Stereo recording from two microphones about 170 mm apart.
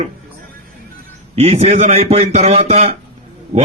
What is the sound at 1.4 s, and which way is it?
A man's voice, 40° right (ahead or behind).